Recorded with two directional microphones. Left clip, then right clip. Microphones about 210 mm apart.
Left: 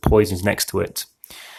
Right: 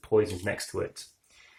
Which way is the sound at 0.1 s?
45° left (ahead or behind).